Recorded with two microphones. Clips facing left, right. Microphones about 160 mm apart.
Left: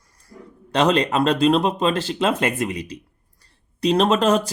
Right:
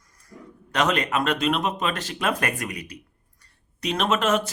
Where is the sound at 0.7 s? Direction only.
30° left (ahead or behind).